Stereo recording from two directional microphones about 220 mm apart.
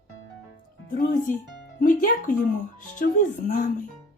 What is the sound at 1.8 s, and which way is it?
Speech, 35° left (ahead or behind).